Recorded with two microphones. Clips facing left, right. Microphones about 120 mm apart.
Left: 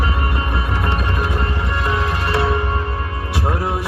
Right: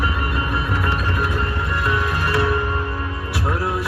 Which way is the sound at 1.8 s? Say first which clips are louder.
Left 1 dB; 25° left (ahead or behind).